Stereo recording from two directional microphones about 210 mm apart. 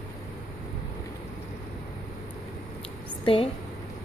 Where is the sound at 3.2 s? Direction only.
25° left (ahead or behind).